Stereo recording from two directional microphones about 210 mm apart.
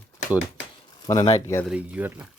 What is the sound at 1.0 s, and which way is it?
Speech, 20° left (ahead or behind).